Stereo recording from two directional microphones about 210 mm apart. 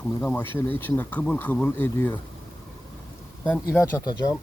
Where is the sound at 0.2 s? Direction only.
5° left (ahead or behind).